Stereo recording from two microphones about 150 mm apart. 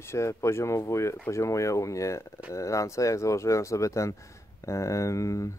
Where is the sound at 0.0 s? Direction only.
20° left (ahead or behind).